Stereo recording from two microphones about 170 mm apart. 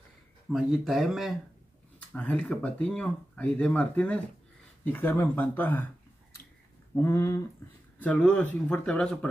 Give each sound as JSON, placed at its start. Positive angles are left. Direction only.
{"t": 0.5, "sound": "speech", "side_deg": 0}
{"t": 7.0, "sound": "speech", "side_deg": 15}